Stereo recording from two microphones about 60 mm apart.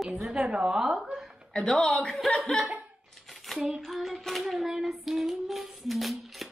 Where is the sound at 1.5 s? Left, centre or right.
Centre.